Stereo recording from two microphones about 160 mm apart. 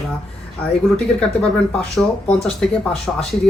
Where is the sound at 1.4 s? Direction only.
5° left (ahead or behind).